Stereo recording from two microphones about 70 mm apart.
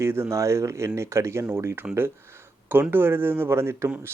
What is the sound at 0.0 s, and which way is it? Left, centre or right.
Speech, right.